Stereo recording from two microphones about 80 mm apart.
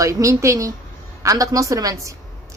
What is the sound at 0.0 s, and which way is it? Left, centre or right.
A woman's voice, right.